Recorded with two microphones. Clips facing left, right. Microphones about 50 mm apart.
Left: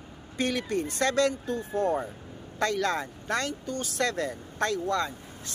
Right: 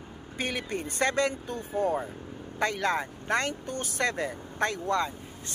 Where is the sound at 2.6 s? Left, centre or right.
Right.